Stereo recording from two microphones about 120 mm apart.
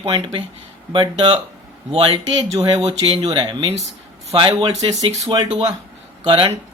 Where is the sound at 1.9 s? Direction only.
55° right (ahead or behind).